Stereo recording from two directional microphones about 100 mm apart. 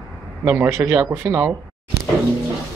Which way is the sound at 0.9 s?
10° right (ahead or behind).